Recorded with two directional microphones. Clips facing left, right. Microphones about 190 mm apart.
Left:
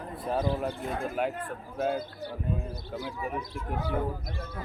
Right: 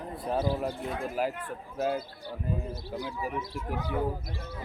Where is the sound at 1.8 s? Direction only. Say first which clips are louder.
Even; 5° right (ahead or behind).